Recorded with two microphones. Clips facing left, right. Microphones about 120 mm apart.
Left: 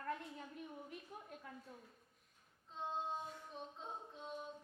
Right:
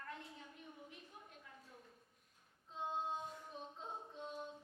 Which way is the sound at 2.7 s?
Centre (ahead or behind).